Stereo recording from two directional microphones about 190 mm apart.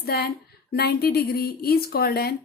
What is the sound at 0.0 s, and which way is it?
A woman's voice, 50° left (ahead or behind).